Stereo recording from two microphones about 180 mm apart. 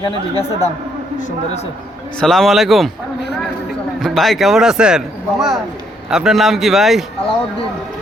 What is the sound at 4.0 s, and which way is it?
A man's voice, centre (ahead or behind).